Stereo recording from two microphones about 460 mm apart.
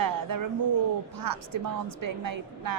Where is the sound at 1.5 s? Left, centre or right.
Right.